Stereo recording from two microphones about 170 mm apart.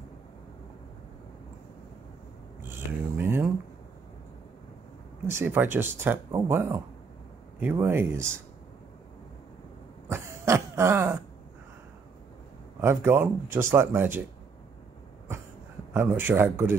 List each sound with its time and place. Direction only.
3.2 s a sound: 10° right (ahead or behind)
5.2 s speech: 15° right (ahead or behind)
10.1 s throat clearing: 15° right (ahead or behind)
12.8 s speech: 15° right (ahead or behind)
15.9 s speech: 10° right (ahead or behind)